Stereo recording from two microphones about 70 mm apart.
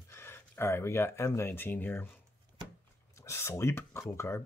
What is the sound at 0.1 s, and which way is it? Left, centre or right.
Speech, left.